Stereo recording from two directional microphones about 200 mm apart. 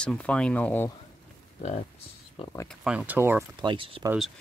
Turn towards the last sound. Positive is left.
turn(degrees=-25)  # may be behind; listen again after turning